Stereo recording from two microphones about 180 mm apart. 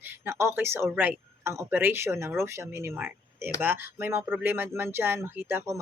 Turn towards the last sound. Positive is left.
turn(degrees=-15)  # may be behind; listen again after turning